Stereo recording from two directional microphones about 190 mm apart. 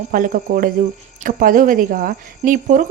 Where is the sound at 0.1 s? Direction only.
45° right (ahead or behind).